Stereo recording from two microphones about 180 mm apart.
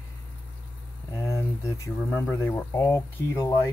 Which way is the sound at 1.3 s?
15° left (ahead or behind).